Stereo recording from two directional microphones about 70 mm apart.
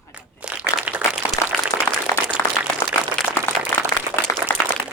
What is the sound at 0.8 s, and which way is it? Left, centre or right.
Applause, centre.